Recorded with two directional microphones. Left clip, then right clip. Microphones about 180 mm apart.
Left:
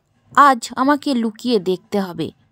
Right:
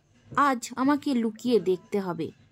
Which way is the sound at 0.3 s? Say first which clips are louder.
Left 12 dB; 45° left (ahead or behind).